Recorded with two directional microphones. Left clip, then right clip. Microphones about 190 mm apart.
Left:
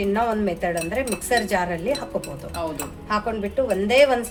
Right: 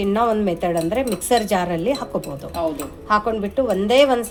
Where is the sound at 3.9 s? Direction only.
25° right (ahead or behind).